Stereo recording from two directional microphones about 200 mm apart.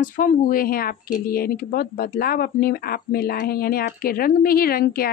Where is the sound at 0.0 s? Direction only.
40° left (ahead or behind).